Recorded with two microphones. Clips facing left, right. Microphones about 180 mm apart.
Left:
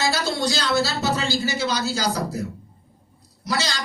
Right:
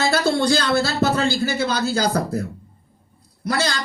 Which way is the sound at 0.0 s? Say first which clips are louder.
Right 5 dB; 55° right (ahead or behind).